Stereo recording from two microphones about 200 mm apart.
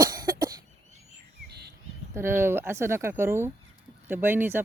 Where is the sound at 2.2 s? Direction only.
10° right (ahead or behind).